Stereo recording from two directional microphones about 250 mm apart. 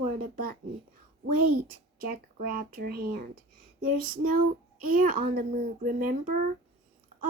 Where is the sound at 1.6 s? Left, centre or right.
Right.